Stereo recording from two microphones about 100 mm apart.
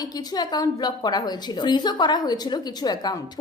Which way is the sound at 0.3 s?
45° left (ahead or behind).